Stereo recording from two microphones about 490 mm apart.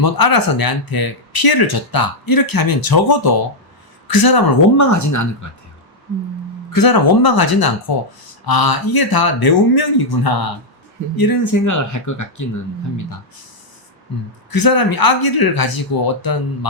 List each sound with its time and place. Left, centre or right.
0.0 s speech: left
6.7 s speech: left
14.5 s speech: left